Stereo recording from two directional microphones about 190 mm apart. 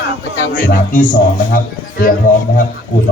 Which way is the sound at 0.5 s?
45° left (ahead or behind).